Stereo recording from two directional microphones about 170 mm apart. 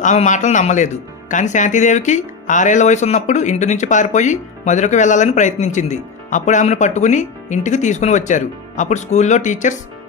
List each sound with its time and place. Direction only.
0.0 s speech: 45° left (ahead or behind)